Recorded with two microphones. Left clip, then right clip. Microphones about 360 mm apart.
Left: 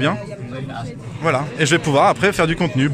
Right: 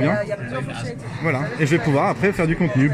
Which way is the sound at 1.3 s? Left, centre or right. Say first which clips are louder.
Left 4 dB; left.